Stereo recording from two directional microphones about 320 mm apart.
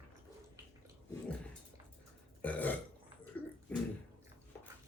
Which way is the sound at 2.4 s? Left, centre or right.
Centre.